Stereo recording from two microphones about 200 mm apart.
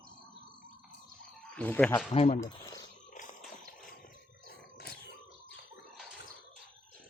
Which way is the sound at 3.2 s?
40° left (ahead or behind).